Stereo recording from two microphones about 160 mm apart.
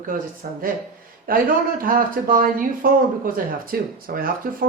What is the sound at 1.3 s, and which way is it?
Speech, 60° right (ahead or behind).